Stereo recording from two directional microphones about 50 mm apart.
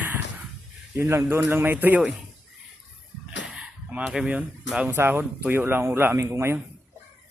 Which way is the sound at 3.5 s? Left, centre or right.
Right.